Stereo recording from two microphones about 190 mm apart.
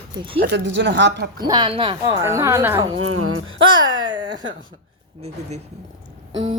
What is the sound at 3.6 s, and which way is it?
Speech, 25° right (ahead or behind).